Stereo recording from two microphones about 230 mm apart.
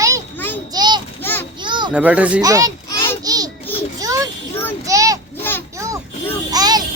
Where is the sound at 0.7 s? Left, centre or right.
Centre.